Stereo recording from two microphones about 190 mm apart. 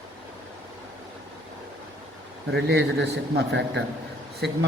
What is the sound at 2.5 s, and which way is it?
A man's voice, 60° right (ahead or behind).